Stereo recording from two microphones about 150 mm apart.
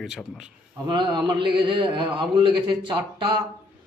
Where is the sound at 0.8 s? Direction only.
30° right (ahead or behind).